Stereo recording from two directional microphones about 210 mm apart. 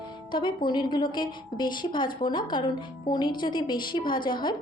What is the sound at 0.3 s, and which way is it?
A woman's voice, 20° left (ahead or behind).